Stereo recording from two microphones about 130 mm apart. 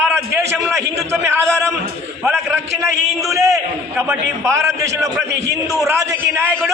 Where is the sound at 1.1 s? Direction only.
20° right (ahead or behind).